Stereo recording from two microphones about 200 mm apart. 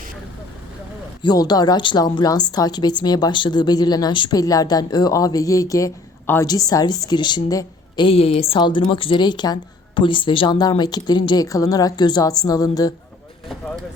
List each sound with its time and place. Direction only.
1.2 s a woman's voice: 20° left (ahead or behind)